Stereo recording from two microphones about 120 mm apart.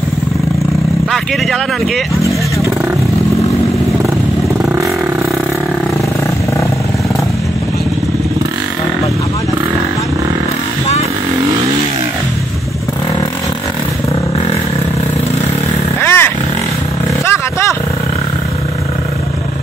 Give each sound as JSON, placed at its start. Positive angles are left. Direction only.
{"t": 16.0, "sound": "vehicle", "side_deg": 20}
{"t": 17.3, "sound": "vehicle", "side_deg": 25}